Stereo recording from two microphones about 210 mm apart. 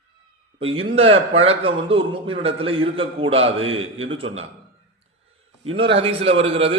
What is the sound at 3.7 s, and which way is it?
Speech, 70° right (ahead or behind).